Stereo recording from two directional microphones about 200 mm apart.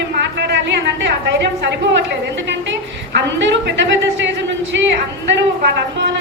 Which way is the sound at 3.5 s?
60° right (ahead or behind).